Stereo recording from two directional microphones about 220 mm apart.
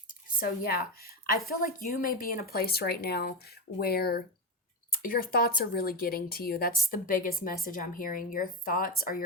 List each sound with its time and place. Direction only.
0.3 s a woman's voice: 45° left (ahead or behind)